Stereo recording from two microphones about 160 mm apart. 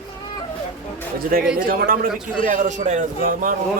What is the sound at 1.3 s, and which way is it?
Speech, 70° right (ahead or behind).